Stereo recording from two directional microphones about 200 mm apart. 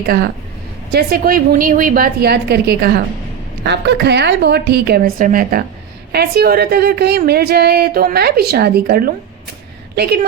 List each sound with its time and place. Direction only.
0.9 s a woman's voice: 50° right (ahead or behind)